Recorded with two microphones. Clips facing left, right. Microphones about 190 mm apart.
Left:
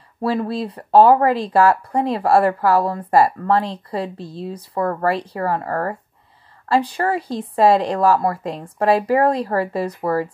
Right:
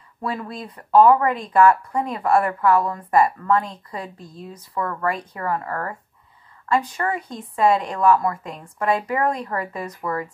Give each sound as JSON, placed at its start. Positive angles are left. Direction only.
{"t": 0.2, "sound": "speech", "side_deg": 30}